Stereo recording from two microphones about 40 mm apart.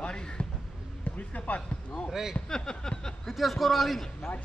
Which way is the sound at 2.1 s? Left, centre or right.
Centre.